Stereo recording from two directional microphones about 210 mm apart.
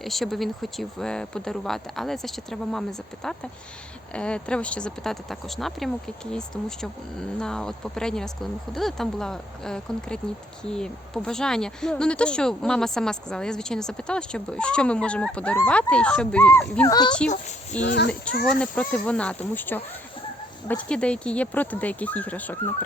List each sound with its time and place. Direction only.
0.0 s speech: centre (ahead or behind); by 17.2 s 20° left (ahead or behind)
17.2 s a child's voice: 35° left (ahead or behind)
17.8 s a child's voice: 50° left (ahead or behind)
18.6 s speech: 5° left (ahead or behind)